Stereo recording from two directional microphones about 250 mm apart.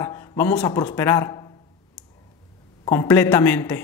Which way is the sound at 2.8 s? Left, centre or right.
Centre.